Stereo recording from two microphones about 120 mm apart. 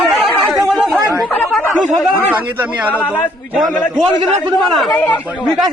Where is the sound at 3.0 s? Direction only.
15° left (ahead or behind).